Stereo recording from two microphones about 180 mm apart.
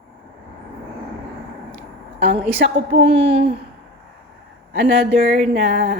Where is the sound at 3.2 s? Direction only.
30° right (ahead or behind).